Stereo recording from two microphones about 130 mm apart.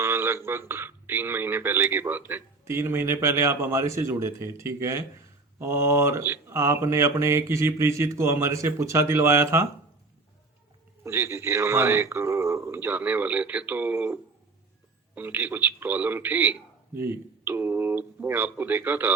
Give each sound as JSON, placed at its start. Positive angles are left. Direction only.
{"t": 0.0, "sound": "speech", "side_deg": -15}
{"t": 11.0, "sound": "a man's voice", "side_deg": -20}